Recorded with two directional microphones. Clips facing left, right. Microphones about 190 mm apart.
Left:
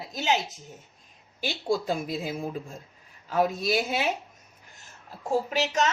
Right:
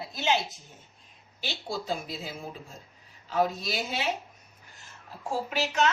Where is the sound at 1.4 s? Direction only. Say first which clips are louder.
Left 8 dB; 50° left (ahead or behind).